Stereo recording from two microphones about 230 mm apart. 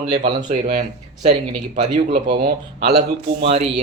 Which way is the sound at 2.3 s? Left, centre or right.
Right.